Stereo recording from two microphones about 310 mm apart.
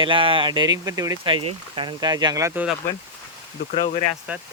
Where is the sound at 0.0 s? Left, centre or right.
Centre.